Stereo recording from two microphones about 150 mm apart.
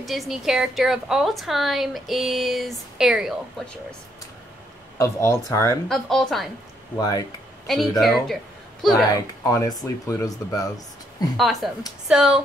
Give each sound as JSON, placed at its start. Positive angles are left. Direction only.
{"t": 0.0, "sound": "a woman's voice", "side_deg": 0}
{"t": 4.9, "sound": "speech", "side_deg": 20}
{"t": 5.9, "sound": "a woman's voice", "side_deg": 0}
{"t": 7.0, "sound": "speech", "side_deg": 25}
{"t": 7.6, "sound": "a woman's voice", "side_deg": 0}
{"t": 9.1, "sound": "speech", "side_deg": 20}
{"t": 11.3, "sound": "a woman's voice", "side_deg": 0}